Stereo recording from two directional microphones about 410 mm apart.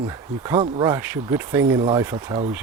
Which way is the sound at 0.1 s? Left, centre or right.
Centre.